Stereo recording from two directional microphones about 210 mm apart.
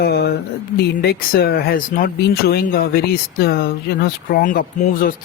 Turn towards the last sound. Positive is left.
turn(degrees=45)  # may be behind; listen again after turning